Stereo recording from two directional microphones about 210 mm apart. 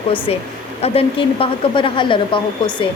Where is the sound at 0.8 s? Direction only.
25° left (ahead or behind).